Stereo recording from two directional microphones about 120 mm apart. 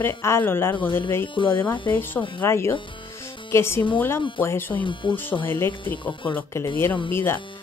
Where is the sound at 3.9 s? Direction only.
20° left (ahead or behind).